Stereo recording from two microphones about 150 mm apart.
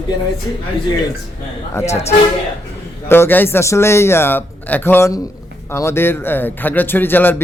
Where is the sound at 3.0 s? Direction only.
15° left (ahead or behind).